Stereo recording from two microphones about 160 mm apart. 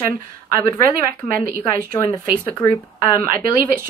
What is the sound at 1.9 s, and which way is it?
Speech, 10° left (ahead or behind).